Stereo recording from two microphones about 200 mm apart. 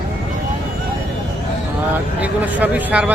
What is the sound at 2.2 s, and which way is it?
Speech, 5° right (ahead or behind).